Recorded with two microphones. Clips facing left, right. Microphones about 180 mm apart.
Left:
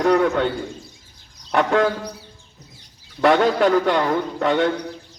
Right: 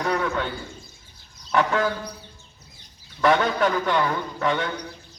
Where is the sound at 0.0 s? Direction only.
45° left (ahead or behind).